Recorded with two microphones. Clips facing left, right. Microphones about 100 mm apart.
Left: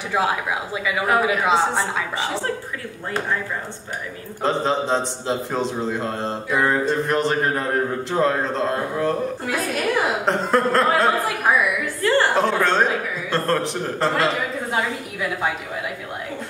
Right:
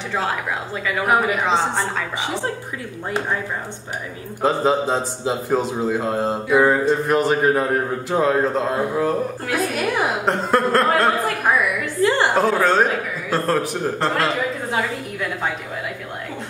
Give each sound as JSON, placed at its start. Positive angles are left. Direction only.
{"t": 0.1, "sound": "a woman's voice", "side_deg": 10}
{"t": 4.4, "sound": "a man's voice", "side_deg": -5}
{"t": 12.0, "sound": "a sound", "side_deg": -15}
{"t": 12.4, "sound": "a man's voice", "side_deg": -5}